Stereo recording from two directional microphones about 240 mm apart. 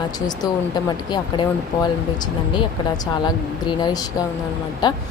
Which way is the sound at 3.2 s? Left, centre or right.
Centre.